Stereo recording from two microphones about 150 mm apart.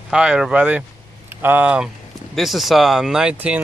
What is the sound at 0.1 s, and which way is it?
Speech, 5° right (ahead or behind).